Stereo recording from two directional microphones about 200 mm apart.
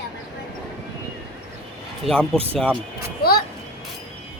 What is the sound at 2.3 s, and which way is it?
Speech, 30° right (ahead or behind).